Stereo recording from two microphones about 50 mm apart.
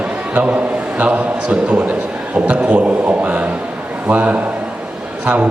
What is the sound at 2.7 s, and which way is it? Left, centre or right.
A man's voice, right.